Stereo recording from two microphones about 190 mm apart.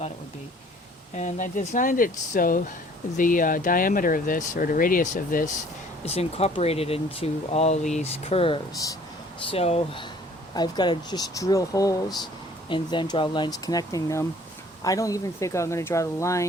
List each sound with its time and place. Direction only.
1.1 s speech: 40° left (ahead or behind)
6.1 s speech: 30° left (ahead or behind); by 16.5 s 15° left (ahead or behind)